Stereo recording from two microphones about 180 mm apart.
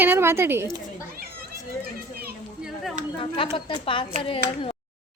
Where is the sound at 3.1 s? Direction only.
30° left (ahead or behind).